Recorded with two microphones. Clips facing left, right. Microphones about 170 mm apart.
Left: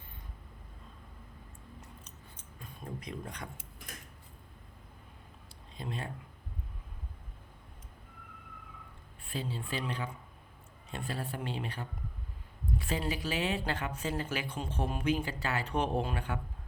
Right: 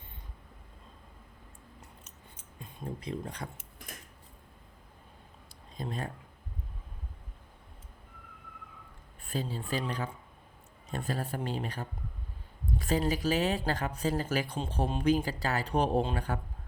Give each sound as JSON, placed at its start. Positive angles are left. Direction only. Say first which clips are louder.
{"t": 2.6, "sound": "speech", "louder": "right 3 dB", "side_deg": -25}
{"t": 5.7, "sound": "speech", "louder": "right 3 dB", "side_deg": -40}
{"t": 9.2, "sound": "speech", "louder": "right 3 dB", "side_deg": -40}